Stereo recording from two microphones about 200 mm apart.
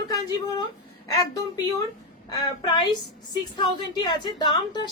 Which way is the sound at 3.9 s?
20° left (ahead or behind).